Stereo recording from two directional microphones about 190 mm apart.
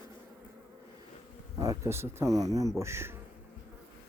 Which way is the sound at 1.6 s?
15° right (ahead or behind).